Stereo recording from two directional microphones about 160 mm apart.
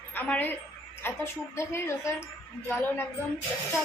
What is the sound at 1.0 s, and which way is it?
A woman's voice, 15° left (ahead or behind).